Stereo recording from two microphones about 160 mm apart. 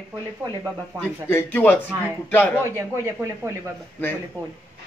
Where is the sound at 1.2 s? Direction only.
15° left (ahead or behind).